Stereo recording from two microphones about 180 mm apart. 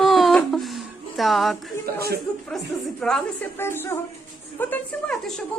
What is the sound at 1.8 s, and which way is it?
Chuckle, 60° right (ahead or behind).